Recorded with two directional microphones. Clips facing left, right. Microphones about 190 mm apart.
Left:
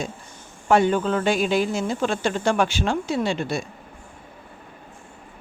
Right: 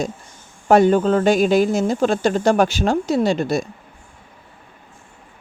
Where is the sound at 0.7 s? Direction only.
40° right (ahead or behind).